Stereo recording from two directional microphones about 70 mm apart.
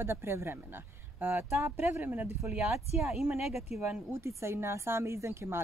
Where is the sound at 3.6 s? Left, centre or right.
Right.